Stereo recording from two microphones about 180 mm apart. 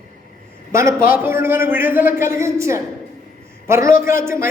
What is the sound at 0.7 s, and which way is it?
A man's voice, 15° right (ahead or behind).